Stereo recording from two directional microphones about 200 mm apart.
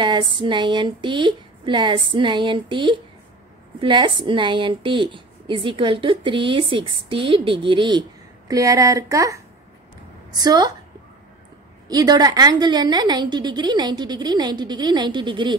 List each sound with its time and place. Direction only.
0.0 s a woman's voice: 25° right (ahead or behind)
11.9 s a woman's voice: 20° right (ahead or behind)